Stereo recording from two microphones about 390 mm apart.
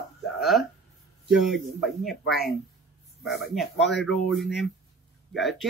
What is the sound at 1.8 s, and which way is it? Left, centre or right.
Speech, centre.